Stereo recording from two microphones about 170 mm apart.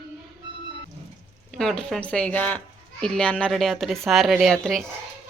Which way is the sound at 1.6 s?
5° left (ahead or behind).